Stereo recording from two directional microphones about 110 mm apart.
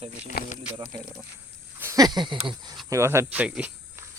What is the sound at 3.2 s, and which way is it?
Speech, 15° right (ahead or behind).